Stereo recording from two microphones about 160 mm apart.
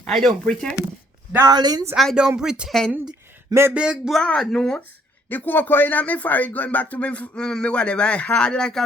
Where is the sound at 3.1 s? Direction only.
15° right (ahead or behind).